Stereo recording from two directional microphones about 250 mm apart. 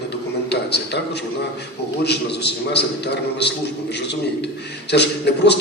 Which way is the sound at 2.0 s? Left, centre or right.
Left.